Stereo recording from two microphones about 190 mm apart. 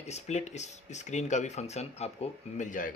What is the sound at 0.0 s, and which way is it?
Speech, 35° left (ahead or behind).